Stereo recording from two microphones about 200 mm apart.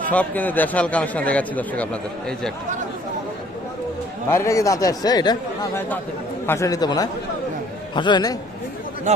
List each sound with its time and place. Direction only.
0.1 s a man's voice: 10° left (ahead or behind)
4.3 s a man's voice: 15° left (ahead or behind)
9.1 s speech: 35° right (ahead or behind)